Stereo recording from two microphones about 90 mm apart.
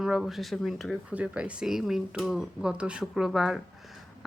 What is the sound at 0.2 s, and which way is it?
Speech, centre (ahead or behind).